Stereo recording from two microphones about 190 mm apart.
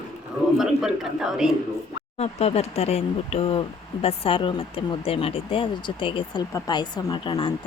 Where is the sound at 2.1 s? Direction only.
35° left (ahead or behind).